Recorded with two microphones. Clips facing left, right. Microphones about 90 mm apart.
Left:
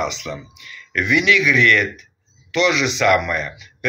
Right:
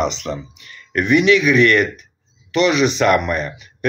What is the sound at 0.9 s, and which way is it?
Speech, 45° right (ahead or behind).